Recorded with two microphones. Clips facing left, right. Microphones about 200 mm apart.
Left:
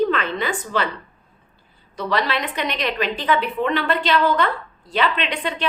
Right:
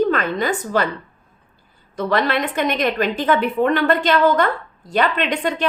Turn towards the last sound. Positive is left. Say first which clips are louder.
# right 4 dB
turn(degrees=-45)  # may be behind; listen again after turning